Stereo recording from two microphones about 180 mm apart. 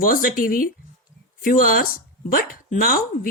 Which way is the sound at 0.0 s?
50° left (ahead or behind).